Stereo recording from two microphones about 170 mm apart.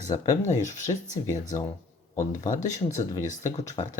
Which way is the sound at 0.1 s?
20° left (ahead or behind).